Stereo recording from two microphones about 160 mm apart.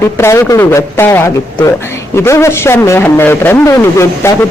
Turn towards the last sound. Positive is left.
turn(degrees=15)  # may be behind; listen again after turning